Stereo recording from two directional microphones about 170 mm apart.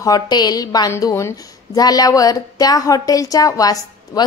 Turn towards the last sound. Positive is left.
turn(degrees=20)  # may be behind; listen again after turning